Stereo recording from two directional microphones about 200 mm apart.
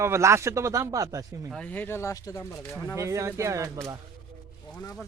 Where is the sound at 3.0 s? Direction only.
15° right (ahead or behind).